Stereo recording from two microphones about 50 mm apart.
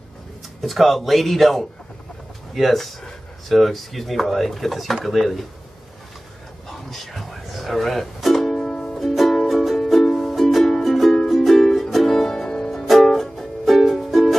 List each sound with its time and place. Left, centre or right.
0.6 s speech: centre
6.7 s ukulele: centre
12.8 s music: centre